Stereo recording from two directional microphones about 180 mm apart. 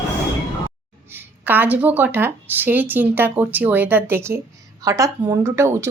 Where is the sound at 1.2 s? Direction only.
10° right (ahead or behind).